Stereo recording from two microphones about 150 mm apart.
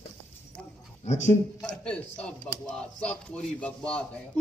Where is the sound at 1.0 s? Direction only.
50° left (ahead or behind).